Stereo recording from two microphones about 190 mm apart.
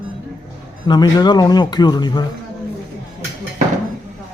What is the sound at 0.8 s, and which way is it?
Speech, 20° left (ahead or behind).